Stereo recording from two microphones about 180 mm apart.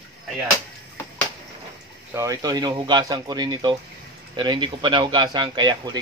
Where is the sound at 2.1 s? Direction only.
20° right (ahead or behind).